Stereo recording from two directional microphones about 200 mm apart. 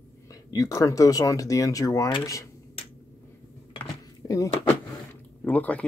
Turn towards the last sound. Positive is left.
turn(degrees=5)  # may be behind; listen again after turning